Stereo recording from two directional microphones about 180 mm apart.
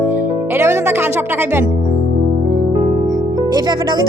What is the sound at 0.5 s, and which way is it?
Music, 15° right (ahead or behind).